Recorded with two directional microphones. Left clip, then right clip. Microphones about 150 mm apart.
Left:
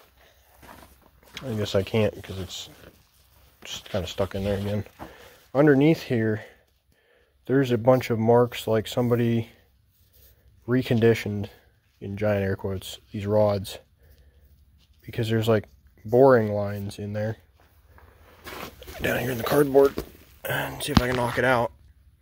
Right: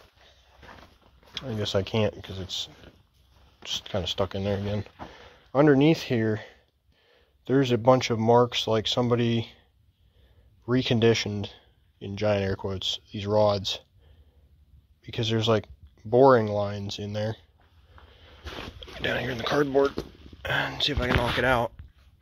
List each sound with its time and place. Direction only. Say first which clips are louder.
1.6 s speech: left 2 dB; 30° left (ahead or behind)
3.5 s a sound: right 1 dB; 10° left (ahead or behind)
4.2 s speech: left 1 dB; 10° left (ahead or behind)
7.1 s a sound: left 1 dB; 10° left (ahead or behind)
8.4 s speech: even; 15° left (ahead or behind)
10.7 s speech: left 1 dB; 10° left (ahead or behind)
15.0 s speech: even; 15° left (ahead or behind)
18.8 s speech: left 2 dB; 30° left (ahead or behind)
19.6 s speech: left 6 dB; 20° left (ahead or behind)
20.6 s speech: left 1 dB; 5° left (ahead or behind)